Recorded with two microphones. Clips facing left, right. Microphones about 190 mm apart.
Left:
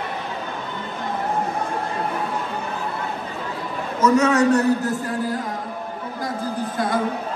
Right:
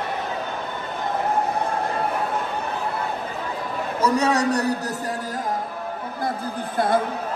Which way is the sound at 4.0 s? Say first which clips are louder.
Left 4 dB; 35° right (ahead or behind).